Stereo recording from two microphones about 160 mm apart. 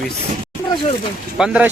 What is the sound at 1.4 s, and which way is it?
Speech, 10° right (ahead or behind).